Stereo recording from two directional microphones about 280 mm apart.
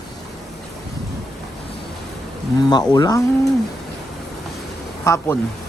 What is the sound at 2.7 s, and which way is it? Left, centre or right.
Speech, centre.